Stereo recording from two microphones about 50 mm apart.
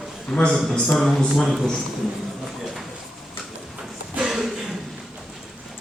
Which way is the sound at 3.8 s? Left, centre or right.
Centre.